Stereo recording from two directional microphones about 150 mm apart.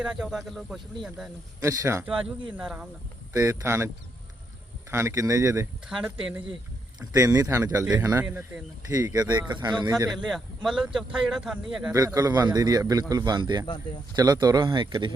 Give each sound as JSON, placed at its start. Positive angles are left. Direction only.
{"t": 0.0, "sound": "a man's voice", "side_deg": -5}
{"t": 1.6, "sound": "a man's voice", "side_deg": -20}
{"t": 2.0, "sound": "a man's voice", "side_deg": -5}
{"t": 3.3, "sound": "a man's voice", "side_deg": -20}
{"t": 5.9, "sound": "a man's voice", "side_deg": -5}
{"t": 7.1, "sound": "a man's voice", "side_deg": -25}
{"t": 8.2, "sound": "speech", "side_deg": -10}
{"t": 9.1, "sound": "a man's voice", "side_deg": -25}
{"t": 10.1, "sound": "a man's voice", "side_deg": 0}
{"t": 11.9, "sound": "a man's voice", "side_deg": -25}
{"t": 13.7, "sound": "speech", "side_deg": 30}
{"t": 14.2, "sound": "a man's voice", "side_deg": -25}